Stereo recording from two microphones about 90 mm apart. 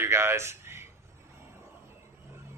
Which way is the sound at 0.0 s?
30° right (ahead or behind).